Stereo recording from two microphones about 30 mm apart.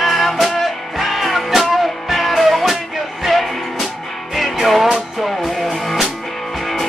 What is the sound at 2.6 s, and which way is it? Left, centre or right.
Music, centre.